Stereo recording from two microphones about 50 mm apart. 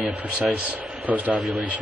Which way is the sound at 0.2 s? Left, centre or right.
Right.